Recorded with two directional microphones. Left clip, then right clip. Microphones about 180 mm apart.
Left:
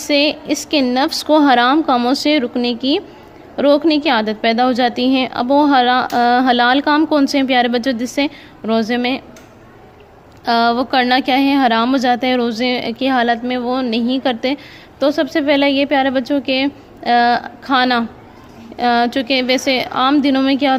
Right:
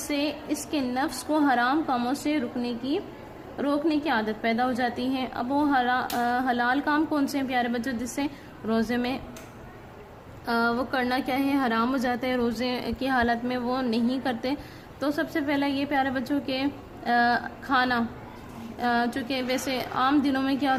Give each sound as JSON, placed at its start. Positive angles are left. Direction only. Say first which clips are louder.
{"t": 0.1, "sound": "a woman's voice", "louder": "left 14 dB", "side_deg": 40}
{"t": 10.4, "sound": "a woman's voice", "louder": "left 11 dB", "side_deg": 40}